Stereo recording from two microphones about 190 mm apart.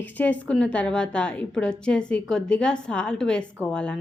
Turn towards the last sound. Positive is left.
turn(degrees=5)  # may be behind; listen again after turning